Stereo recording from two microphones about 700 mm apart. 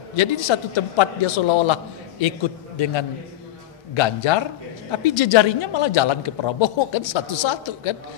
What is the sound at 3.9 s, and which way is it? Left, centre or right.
A woman's voice, left.